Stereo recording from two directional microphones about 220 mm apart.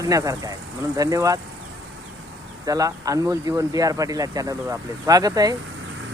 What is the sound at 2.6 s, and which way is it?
Speech, 15° right (ahead or behind).